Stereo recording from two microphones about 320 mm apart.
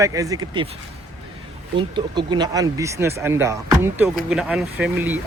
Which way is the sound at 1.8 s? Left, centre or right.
Centre.